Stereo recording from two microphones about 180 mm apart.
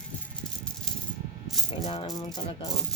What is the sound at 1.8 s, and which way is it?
Speech, 30° left (ahead or behind).